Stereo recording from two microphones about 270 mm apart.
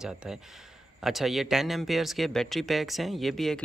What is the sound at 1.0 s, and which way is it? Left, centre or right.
Speech, centre.